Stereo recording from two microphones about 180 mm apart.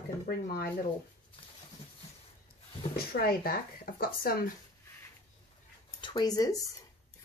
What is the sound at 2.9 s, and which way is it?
Speech, 55° left (ahead or behind).